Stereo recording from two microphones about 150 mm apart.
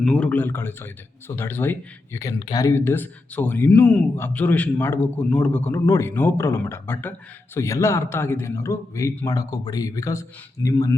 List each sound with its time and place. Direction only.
0.0 s a man's voice: 5° left (ahead or behind)
2.4 s a man's voice: 25° left (ahead or behind)